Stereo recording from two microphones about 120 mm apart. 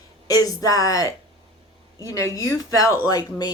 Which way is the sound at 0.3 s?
30° left (ahead or behind).